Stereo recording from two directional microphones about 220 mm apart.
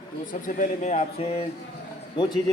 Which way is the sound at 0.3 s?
35° left (ahead or behind).